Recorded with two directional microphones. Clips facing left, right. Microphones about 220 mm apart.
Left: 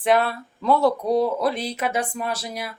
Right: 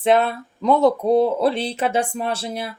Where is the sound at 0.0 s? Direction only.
25° right (ahead or behind).